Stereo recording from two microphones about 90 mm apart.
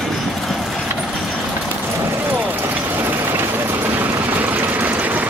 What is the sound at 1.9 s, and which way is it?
Vehicle, 25° right (ahead or behind).